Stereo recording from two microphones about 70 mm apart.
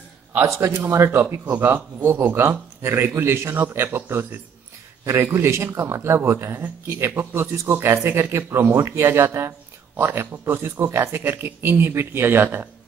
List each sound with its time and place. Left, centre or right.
0.5 s speech: right
1.2 s speech: right